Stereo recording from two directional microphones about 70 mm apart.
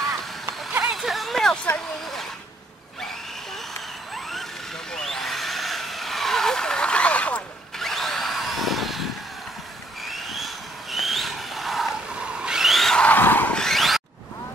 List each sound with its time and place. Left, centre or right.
0.8 s a sound: centre
4.1 s vehicle: centre
7.8 s drill: centre
10.0 s vehicle: centre
13.1 s vehicle: left
13.6 s a sound: centre